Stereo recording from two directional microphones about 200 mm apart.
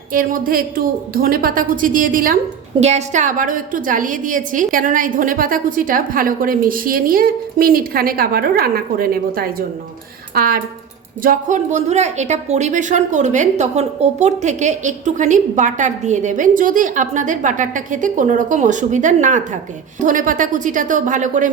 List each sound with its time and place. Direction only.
0.1 s a woman's voice: 45° right (ahead or behind)